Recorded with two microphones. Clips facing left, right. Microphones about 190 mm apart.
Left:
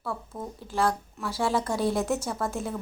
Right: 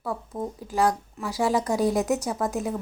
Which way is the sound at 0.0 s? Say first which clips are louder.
Right 4 dB; 15° right (ahead or behind).